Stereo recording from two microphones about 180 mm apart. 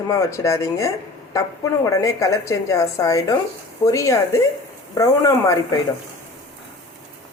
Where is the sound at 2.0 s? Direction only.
20° left (ahead or behind).